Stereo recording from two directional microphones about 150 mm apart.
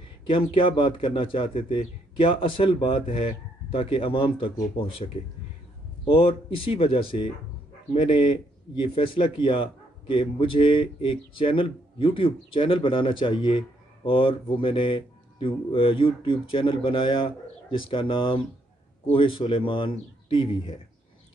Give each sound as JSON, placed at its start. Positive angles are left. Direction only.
{"t": 0.3, "sound": "a man's voice", "side_deg": 35}
{"t": 6.1, "sound": "a man's voice", "side_deg": 35}